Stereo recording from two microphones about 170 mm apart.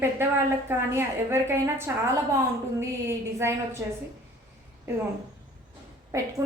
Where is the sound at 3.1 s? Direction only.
15° right (ahead or behind).